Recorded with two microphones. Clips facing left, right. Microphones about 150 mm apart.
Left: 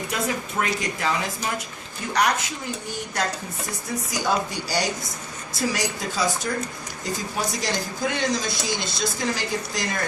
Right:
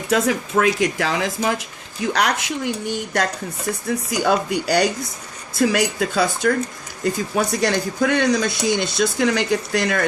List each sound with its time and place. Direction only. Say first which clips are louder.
0.1 s speech: right 11 dB; 90° right
2.1 s speech: left 1 dB; 75° right (ahead or behind)
4.2 s speech: right 5 dB; 60° right (ahead or behind)